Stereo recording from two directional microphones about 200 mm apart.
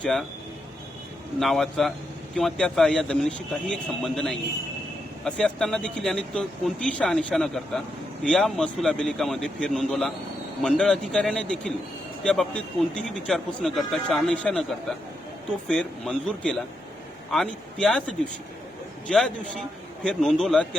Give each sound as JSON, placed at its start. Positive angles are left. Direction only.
{"t": 0.0, "sound": "speech", "side_deg": 0}
{"t": 1.4, "sound": "speech", "side_deg": 0}
{"t": 15.7, "sound": "speech", "side_deg": 5}
{"t": 19.0, "sound": "speech", "side_deg": 0}